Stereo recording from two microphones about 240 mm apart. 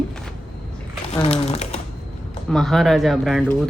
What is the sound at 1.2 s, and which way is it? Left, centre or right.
Speech, left.